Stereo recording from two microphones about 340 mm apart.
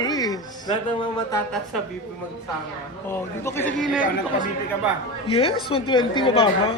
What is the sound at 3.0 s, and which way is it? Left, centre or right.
Speech, centre.